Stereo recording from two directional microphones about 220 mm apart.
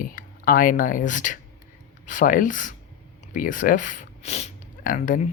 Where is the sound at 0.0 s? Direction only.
40° left (ahead or behind).